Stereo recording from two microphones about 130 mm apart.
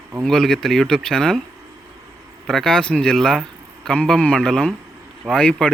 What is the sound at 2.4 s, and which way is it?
Speech, 5° left (ahead or behind).